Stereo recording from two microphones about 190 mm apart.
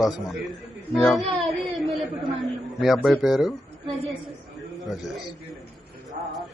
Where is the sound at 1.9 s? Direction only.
Centre (ahead or behind).